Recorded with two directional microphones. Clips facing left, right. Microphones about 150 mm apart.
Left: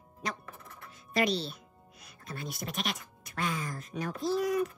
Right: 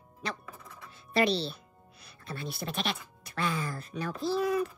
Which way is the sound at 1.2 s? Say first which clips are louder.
Right 2 dB; 30° right (ahead or behind).